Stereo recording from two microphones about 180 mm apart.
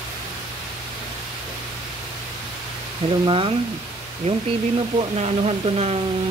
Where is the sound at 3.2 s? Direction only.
30° right (ahead or behind).